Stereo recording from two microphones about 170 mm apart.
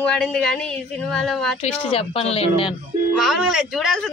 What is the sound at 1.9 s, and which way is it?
Speech, 35° left (ahead or behind).